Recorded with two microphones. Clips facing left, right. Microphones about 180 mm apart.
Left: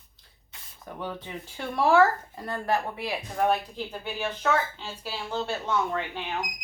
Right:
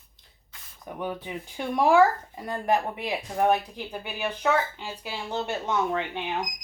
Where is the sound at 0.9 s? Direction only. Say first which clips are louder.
Right 3 dB; 15° right (ahead or behind).